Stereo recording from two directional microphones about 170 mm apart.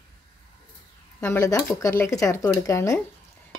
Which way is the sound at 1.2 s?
15° left (ahead or behind).